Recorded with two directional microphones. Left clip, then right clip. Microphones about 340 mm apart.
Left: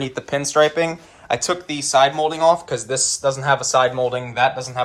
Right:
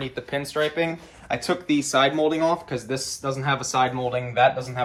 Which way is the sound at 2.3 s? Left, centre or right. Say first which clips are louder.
Left 7 dB; centre.